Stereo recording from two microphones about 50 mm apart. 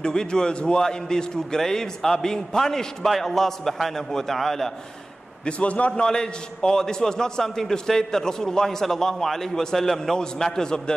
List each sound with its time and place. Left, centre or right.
0.0 s a man's voice: centre
5.4 s a man's voice: left
6.0 s a man's voice: centre